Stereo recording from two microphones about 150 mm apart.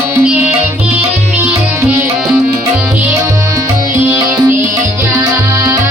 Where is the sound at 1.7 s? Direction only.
15° right (ahead or behind).